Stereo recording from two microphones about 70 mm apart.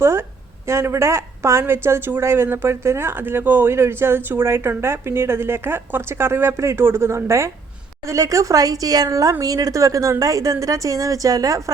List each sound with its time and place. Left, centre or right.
0.0 s a woman's voice: right